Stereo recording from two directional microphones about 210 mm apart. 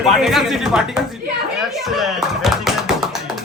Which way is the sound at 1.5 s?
Centre (ahead or behind).